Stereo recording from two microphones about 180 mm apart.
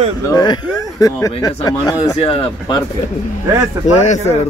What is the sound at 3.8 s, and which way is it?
Speech, 40° left (ahead or behind).